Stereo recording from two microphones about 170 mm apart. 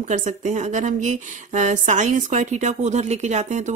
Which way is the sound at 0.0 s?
45° right (ahead or behind).